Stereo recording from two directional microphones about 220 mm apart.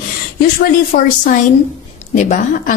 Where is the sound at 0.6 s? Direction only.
40° left (ahead or behind).